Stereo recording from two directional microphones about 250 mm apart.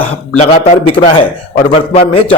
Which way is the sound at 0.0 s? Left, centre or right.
Left.